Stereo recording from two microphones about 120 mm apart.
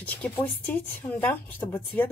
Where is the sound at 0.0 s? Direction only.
15° left (ahead or behind).